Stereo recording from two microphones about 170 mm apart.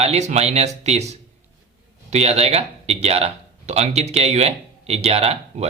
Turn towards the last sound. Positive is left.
turn(degrees=-40)  # may be behind; listen again after turning